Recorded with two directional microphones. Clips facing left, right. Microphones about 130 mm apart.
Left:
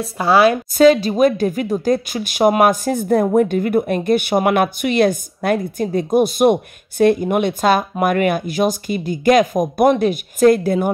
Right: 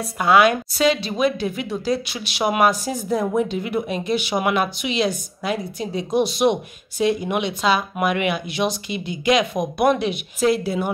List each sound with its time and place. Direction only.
0.2 s a woman's voice: 30° left (ahead or behind)
0.7 s speech: 45° left (ahead or behind)